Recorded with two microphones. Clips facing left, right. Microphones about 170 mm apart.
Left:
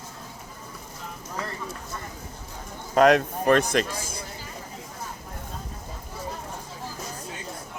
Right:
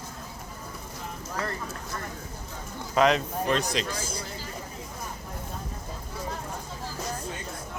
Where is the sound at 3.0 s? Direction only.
55° left (ahead or behind).